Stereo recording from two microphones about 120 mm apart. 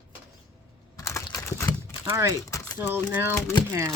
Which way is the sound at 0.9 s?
25° left (ahead or behind).